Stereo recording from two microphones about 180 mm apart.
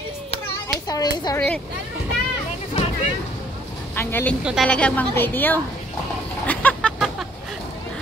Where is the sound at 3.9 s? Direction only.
10° left (ahead or behind).